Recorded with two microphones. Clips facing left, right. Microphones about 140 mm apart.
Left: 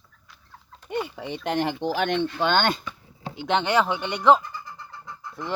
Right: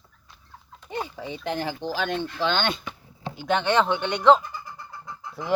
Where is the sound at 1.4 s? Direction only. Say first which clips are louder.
Left 4 dB; 90° left.